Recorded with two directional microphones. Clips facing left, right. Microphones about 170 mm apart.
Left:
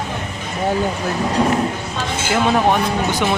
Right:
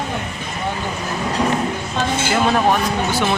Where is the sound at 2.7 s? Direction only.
15° left (ahead or behind).